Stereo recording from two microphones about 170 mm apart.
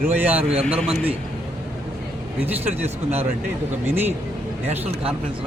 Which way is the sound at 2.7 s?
35° right (ahead or behind).